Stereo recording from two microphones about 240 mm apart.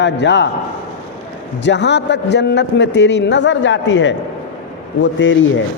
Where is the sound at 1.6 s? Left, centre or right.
Left.